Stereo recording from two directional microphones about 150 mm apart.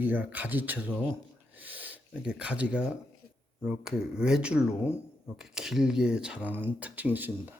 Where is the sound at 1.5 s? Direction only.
10° right (ahead or behind).